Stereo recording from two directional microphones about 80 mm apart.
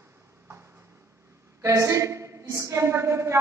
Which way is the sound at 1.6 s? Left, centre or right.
Right.